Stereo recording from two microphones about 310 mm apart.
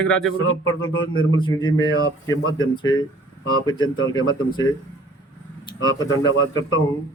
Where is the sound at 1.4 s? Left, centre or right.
Centre.